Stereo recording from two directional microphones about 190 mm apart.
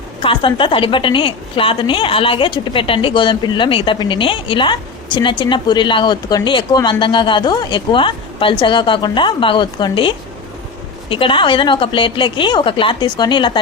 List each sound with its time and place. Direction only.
0.2 s a woman's voice: 25° left (ahead or behind)